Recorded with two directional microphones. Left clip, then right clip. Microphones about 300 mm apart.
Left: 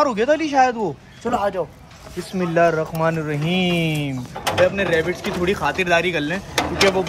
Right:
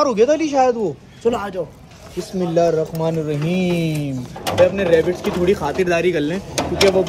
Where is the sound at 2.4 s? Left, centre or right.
Left.